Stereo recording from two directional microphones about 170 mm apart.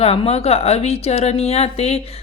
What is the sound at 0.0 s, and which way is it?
A woman's voice, 35° left (ahead or behind).